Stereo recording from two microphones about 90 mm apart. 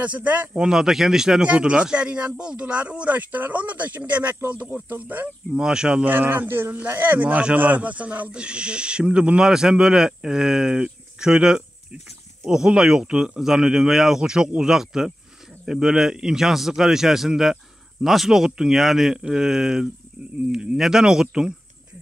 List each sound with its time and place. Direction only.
0.0 s speech: 15° right (ahead or behind)
5.5 s speech: 10° right (ahead or behind)
6.0 s a man's voice: 25° right (ahead or behind)